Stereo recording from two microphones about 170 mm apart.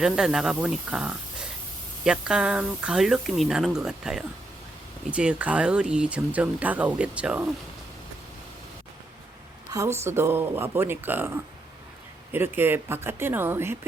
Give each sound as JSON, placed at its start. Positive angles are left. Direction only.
{"t": 0.0, "sound": "speech", "side_deg": -5}
{"t": 9.6, "sound": "speech", "side_deg": -15}
{"t": 12.3, "sound": "speech", "side_deg": -10}